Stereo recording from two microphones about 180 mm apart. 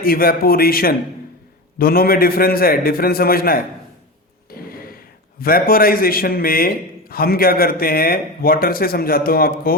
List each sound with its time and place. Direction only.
0.0 s a man's voice: 55° left (ahead or behind)
4.5 s a sound: 55° left (ahead or behind)
5.4 s a man's voice: 55° left (ahead or behind)